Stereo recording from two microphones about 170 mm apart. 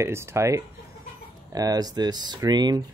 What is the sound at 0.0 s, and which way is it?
Speech, 15° right (ahead or behind).